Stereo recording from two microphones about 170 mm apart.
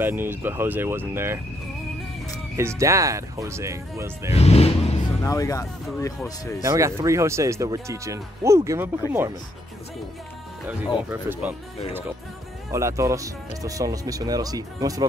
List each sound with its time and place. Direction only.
0.0 s speech: 10° right (ahead or behind)
2.5 s speech: 15° right (ahead or behind)
4.3 s speech: 35° left (ahead or behind)
5.2 s speech: 20° left (ahead or behind)
6.6 s speech: 15° right (ahead or behind)
11.1 s speech: 10° right (ahead or behind)
12.7 s speech: 15° right (ahead or behind)